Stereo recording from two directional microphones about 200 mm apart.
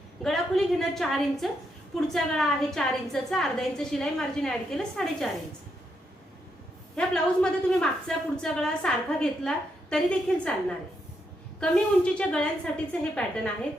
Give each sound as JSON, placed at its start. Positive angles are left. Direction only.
{"t": 0.2, "sound": "a woman's voice", "side_deg": 0}
{"t": 6.9, "sound": "a woman's voice", "side_deg": 5}